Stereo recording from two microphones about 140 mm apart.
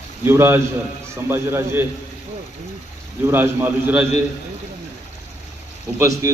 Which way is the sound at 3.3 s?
15° right (ahead or behind).